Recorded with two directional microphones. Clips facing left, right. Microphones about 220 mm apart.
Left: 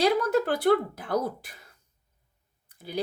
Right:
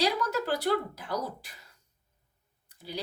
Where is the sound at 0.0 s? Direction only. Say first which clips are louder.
Left 6 dB; 55° left (ahead or behind).